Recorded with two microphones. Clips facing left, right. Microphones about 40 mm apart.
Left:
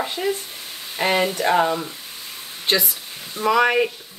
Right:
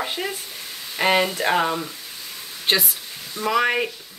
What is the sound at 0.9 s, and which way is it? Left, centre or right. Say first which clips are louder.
Speech: right 1 dB; right.